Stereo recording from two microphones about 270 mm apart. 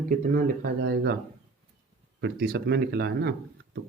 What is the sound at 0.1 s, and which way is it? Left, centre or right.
Speech, right.